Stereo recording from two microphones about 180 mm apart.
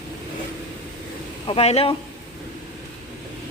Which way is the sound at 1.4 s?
35° left (ahead or behind).